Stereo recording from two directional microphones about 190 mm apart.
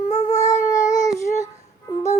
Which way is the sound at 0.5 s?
40° left (ahead or behind).